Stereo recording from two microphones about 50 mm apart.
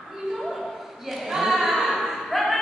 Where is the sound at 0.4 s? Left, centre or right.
Centre.